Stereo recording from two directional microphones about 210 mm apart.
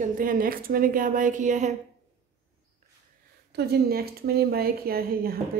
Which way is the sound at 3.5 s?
50° right (ahead or behind).